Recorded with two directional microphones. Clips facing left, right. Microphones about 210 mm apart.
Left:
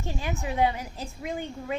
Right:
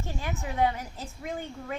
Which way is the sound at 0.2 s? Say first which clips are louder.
Left 2 dB; 20° left (ahead or behind).